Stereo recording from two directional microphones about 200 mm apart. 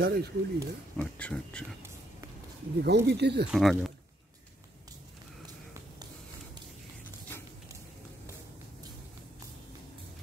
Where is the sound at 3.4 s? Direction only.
Centre (ahead or behind).